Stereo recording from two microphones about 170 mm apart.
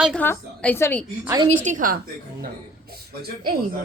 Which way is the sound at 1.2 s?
20° right (ahead or behind).